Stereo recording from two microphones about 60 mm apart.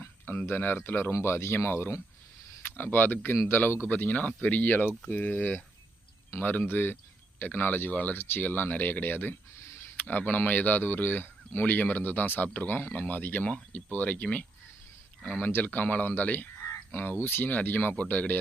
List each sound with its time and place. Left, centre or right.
0.4 s speech: left
9.6 s a sound: left
10.1 s speech: left